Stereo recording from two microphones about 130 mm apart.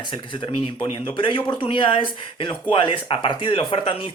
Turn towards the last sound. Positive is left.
turn(degrees=45)  # may be behind; listen again after turning